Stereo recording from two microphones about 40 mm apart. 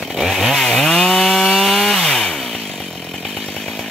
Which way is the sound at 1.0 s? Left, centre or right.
Centre.